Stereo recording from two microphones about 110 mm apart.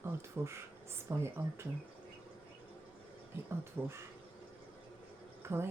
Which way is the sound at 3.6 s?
25° right (ahead or behind).